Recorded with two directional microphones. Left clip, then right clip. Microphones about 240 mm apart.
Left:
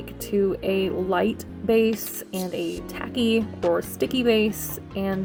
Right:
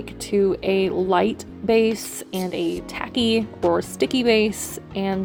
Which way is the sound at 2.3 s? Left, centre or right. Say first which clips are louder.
Right 4 dB; right.